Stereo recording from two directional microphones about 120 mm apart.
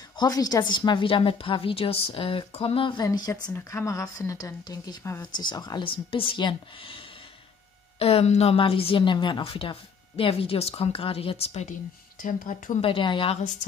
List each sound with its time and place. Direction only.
0.1 s a woman's voice: 35° left (ahead or behind)
3.5 s a woman's voice: 25° left (ahead or behind); by 11.7 s 60° left (ahead or behind)
12.3 s speech: 90° left
12.8 s a woman's voice: 45° left (ahead or behind)